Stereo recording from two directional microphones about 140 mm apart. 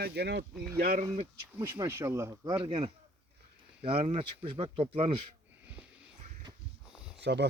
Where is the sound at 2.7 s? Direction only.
45° right (ahead or behind).